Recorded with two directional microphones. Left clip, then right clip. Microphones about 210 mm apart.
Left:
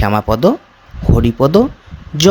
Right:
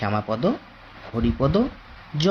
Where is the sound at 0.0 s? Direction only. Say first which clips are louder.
Left 11 dB; 50° left (ahead or behind).